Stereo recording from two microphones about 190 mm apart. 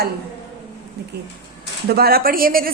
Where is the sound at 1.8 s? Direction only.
55° right (ahead or behind).